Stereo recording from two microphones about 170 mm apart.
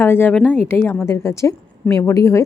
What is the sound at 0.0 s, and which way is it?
A woman's voice, 15° left (ahead or behind).